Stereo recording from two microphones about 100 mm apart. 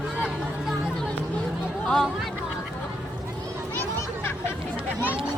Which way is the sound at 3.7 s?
20° left (ahead or behind).